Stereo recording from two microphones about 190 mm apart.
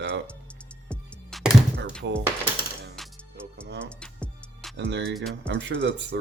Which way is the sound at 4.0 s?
5° left (ahead or behind).